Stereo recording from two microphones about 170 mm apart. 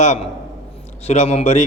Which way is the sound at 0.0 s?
40° left (ahead or behind).